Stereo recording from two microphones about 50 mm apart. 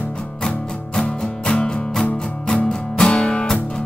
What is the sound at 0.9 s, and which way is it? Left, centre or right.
Music, centre.